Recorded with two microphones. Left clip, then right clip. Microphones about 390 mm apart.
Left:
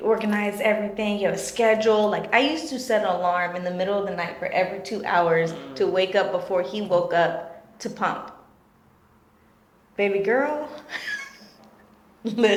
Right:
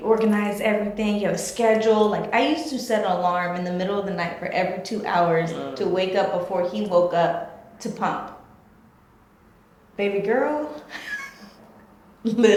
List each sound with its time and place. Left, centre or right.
0.1 s a woman's voice: left
9.9 s a woman's voice: left
10.8 s a sound: left
12.2 s a woman's voice: centre